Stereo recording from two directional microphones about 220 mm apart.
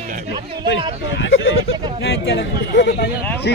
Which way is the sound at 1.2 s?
60° left (ahead or behind).